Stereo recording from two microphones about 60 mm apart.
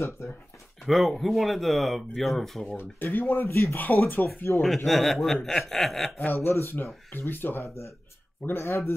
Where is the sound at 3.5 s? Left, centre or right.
Left.